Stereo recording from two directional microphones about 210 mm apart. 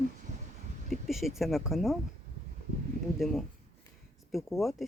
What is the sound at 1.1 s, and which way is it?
Speech, centre (ahead or behind).